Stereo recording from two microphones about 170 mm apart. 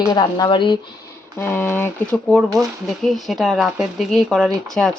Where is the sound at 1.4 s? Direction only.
15° left (ahead or behind).